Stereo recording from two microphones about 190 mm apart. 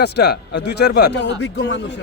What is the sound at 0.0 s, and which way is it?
Speech, 60° left (ahead or behind).